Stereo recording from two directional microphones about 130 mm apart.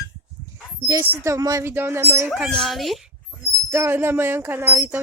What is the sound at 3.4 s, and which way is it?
Speech, 20° right (ahead or behind).